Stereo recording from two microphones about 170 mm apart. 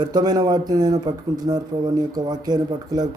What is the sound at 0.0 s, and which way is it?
Speech, 25° right (ahead or behind).